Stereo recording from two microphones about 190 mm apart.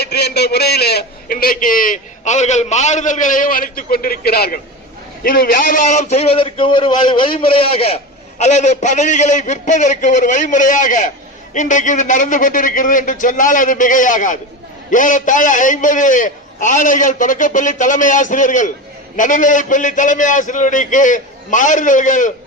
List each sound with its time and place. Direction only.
0.0 s a man's voice: 60° left (ahead or behind); by 22.3 s 45° left (ahead or behind)